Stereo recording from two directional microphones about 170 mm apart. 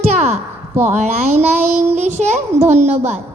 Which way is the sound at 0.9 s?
45° right (ahead or behind).